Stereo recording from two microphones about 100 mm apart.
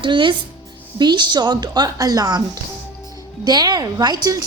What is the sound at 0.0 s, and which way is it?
A woman's voice, 55° right (ahead or behind).